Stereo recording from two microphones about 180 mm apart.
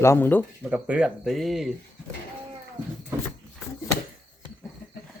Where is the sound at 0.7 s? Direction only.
5° right (ahead or behind).